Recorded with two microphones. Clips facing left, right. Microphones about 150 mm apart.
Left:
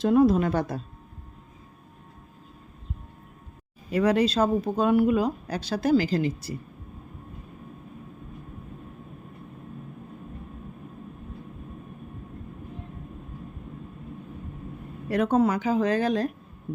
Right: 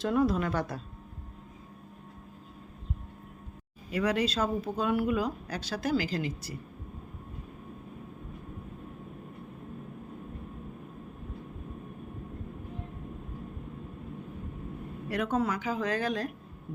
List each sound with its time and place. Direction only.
0.0 s speech: 20° left (ahead or behind)
3.9 s speech: 35° left (ahead or behind)
15.1 s speech: 30° left (ahead or behind)